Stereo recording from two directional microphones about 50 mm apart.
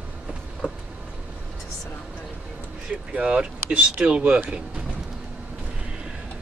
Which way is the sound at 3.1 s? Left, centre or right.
Right.